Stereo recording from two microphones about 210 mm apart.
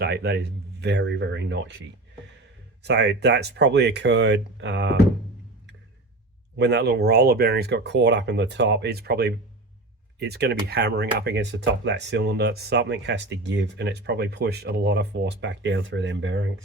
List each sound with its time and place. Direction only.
0.0 s speech: 50° right (ahead or behind)
2.8 s speech: 55° right (ahead or behind)
6.6 s speech: 55° right (ahead or behind)